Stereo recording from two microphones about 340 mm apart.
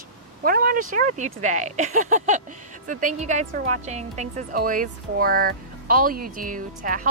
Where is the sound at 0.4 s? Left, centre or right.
Right.